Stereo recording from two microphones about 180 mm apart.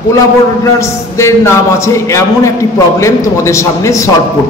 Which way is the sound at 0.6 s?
15° left (ahead or behind).